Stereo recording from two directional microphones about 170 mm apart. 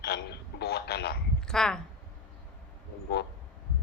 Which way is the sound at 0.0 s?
70° left (ahead or behind).